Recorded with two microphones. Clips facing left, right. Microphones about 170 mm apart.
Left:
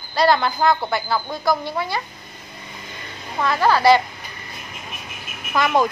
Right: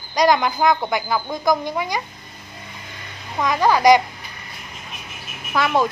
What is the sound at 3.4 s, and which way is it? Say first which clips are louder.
Speech: right 1 dB; 15° right (ahead or behind).